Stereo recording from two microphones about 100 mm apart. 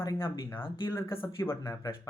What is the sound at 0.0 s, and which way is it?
Speech, 25° left (ahead or behind).